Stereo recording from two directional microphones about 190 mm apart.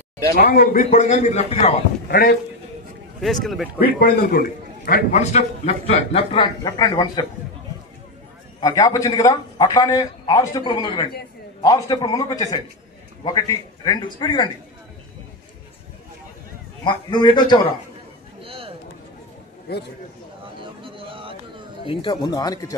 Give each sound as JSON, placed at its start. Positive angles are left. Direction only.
{"t": 0.5, "sound": "a man's voice", "side_deg": 45}
{"t": 2.0, "sound": "a man's voice", "side_deg": 55}
{"t": 3.2, "sound": "speech", "side_deg": 0}
{"t": 3.8, "sound": "a man's voice", "side_deg": 50}
{"t": 8.5, "sound": "a man's voice", "side_deg": 20}
{"t": 16.8, "sound": "a man's voice", "side_deg": 25}
{"t": 18.4, "sound": "a sound", "side_deg": -30}
{"t": 19.7, "sound": "a man's voice", "side_deg": 55}
{"t": 20.6, "sound": "a sound", "side_deg": -25}
{"t": 21.8, "sound": "a man's voice", "side_deg": 25}